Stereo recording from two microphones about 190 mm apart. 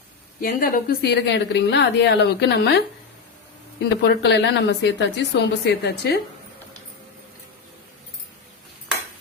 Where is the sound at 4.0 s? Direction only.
65° left (ahead or behind).